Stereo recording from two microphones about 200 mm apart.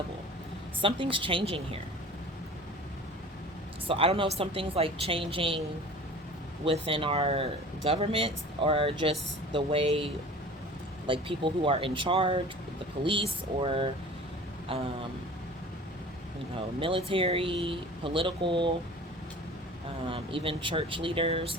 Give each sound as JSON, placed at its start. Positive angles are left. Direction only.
{"t": 0.8, "sound": "speech", "side_deg": -25}
{"t": 3.8, "sound": "speech", "side_deg": -30}
{"t": 6.7, "sound": "speech", "side_deg": -25}
{"t": 16.8, "sound": "speech", "side_deg": -25}
{"t": 20.1, "sound": "speech", "side_deg": -25}